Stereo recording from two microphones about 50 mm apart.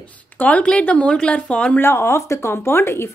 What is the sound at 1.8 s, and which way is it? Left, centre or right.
Speech, left.